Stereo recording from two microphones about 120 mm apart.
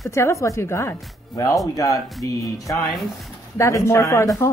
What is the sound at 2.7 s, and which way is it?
Speech, centre (ahead or behind).